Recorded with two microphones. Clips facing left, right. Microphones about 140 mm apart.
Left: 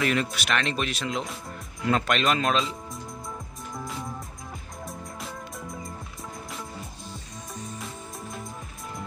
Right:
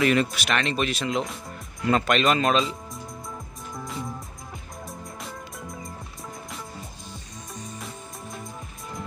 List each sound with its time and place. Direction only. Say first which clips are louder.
0.0 s speech: right 4 dB; centre (ahead or behind)
3.7 s music: right 1 dB; centre (ahead or behind)
7.1 s music: left 1 dB; centre (ahead or behind)